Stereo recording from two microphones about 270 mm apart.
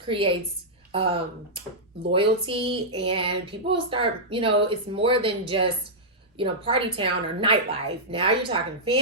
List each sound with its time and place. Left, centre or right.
0.0 s speech: centre